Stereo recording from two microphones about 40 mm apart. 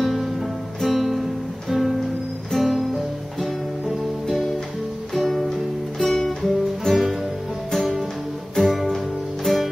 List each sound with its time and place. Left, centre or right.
0.0 s music: centre
5.1 s music: centre